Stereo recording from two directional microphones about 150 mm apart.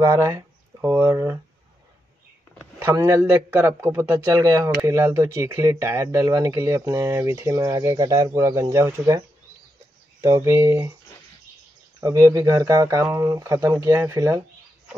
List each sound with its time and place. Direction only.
0.0 s speech: 20° right (ahead or behind)
2.8 s speech: 20° right (ahead or behind)
10.2 s speech: 20° right (ahead or behind)
12.0 s speech: 20° right (ahead or behind)